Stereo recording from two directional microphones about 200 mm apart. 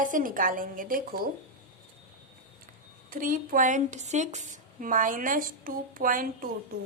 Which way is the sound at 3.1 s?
45° right (ahead or behind).